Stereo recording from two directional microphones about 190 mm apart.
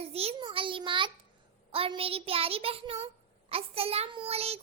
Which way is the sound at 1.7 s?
30° right (ahead or behind).